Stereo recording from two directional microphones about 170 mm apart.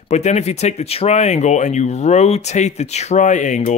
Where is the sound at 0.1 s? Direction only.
40° left (ahead or behind).